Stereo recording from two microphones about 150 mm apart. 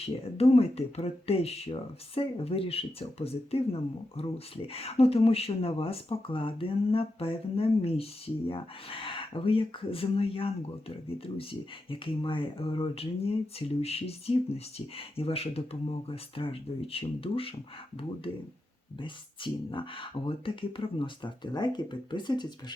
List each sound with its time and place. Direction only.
0.0 s speech: 40° left (ahead or behind)